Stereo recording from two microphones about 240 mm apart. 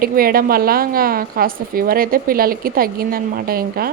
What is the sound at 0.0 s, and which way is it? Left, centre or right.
A woman's voice, right.